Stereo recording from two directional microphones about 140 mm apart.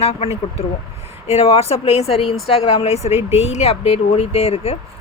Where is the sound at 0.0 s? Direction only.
45° left (ahead or behind).